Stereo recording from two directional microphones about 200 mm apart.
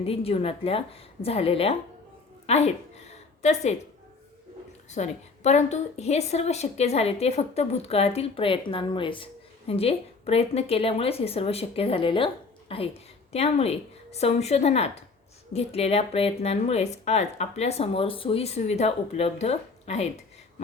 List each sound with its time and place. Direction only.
0.0 s a woman's voice: 30° left (ahead or behind)
2.5 s a sound: 35° left (ahead or behind)
4.9 s a woman's voice: 35° left (ahead or behind)